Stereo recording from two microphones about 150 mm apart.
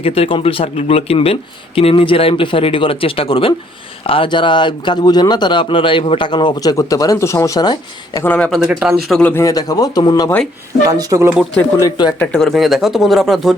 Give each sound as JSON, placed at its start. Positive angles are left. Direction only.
{"t": 0.0, "sound": "speech", "side_deg": 40}
{"t": 8.2, "sound": "speech", "side_deg": 10}
{"t": 8.4, "sound": "speech", "side_deg": 0}
{"t": 9.3, "sound": "speech", "side_deg": 20}
{"t": 10.2, "sound": "speech", "side_deg": 10}
{"t": 10.8, "sound": "speech", "side_deg": -25}
{"t": 11.8, "sound": "speech", "side_deg": 25}
{"t": 12.2, "sound": "speech", "side_deg": 5}